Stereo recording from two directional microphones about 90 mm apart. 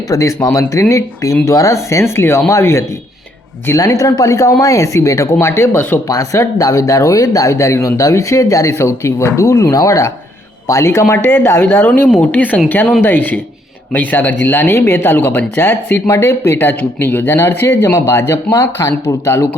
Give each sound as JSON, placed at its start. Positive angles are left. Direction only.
{"t": 0.1, "sound": "speech", "side_deg": 35}
{"t": 6.1, "sound": "speech", "side_deg": 35}